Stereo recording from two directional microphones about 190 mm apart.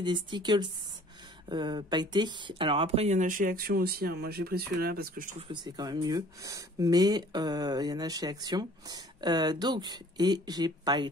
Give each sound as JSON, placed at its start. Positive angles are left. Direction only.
{"t": 0.0, "sound": "speech", "side_deg": -25}
{"t": 5.5, "sound": "speech", "side_deg": -20}